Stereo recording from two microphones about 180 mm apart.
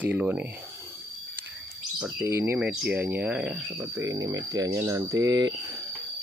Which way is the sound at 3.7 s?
15° right (ahead or behind).